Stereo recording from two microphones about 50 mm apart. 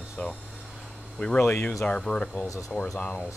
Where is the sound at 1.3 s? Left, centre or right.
Left.